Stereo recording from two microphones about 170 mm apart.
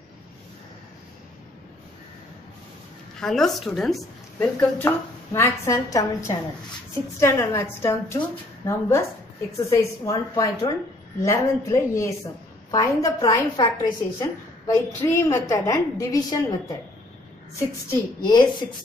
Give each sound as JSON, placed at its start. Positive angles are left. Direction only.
{"t": 3.2, "sound": "a woman's voice", "side_deg": 0}